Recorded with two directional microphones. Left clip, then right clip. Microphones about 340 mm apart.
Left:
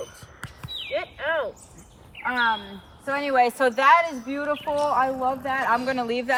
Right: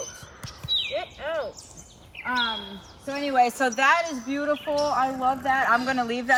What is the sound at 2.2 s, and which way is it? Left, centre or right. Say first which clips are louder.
Speech: left 3 dB; centre.